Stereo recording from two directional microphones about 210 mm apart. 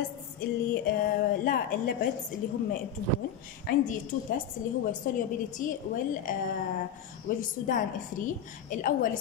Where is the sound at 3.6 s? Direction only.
40° left (ahead or behind).